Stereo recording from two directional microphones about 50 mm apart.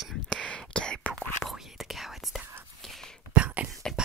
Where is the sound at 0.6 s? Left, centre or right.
Centre.